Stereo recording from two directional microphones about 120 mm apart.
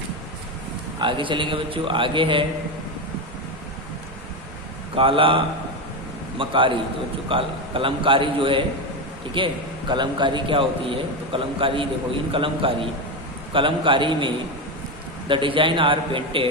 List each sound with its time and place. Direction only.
1.0 s a man's voice: 45° right (ahead or behind)
4.9 s a man's voice: 45° right (ahead or behind)